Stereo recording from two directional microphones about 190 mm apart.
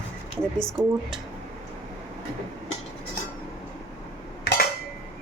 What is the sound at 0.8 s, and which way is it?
Speech, 25° right (ahead or behind).